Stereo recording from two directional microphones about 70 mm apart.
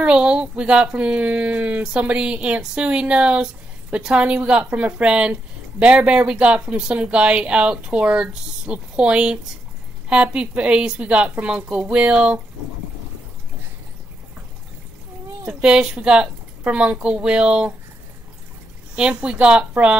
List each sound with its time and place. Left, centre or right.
0.0 s speech: centre
15.4 s speech: centre
18.9 s speech: centre